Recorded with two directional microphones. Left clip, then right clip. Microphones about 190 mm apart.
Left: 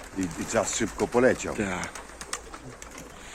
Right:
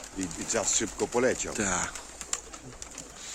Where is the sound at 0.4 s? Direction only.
70° left (ahead or behind).